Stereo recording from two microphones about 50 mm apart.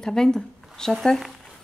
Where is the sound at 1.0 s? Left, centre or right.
Centre.